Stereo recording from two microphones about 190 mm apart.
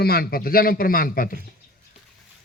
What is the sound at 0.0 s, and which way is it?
A man's voice, 55° left (ahead or behind).